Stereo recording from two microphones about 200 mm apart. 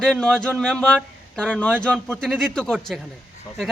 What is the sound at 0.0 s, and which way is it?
Speech, 5° left (ahead or behind).